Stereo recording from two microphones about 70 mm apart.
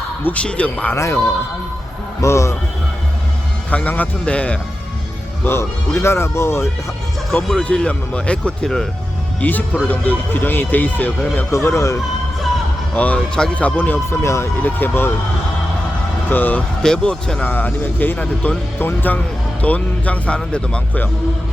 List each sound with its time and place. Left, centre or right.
0.3 s speech: centre
0.9 s speech: left
3.7 s speech: left
5.5 s speech: left
7.5 s speech: centre
8.6 s speech: centre
9.4 s speech: left
11.5 s speech: left
12.9 s speech: centre
14.2 s speech: left
14.6 s speech: left
16.3 s speech: left
16.8 s speech: centre
17.4 s speech: left